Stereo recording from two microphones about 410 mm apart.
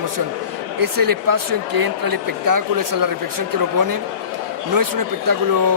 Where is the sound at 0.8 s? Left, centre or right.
Right.